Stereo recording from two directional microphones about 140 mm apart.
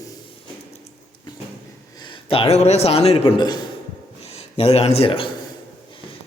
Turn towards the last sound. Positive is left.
turn(degrees=40)  # may be behind; listen again after turning